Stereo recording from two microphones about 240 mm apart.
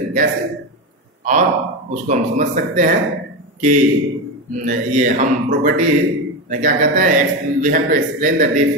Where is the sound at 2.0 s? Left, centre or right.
Right.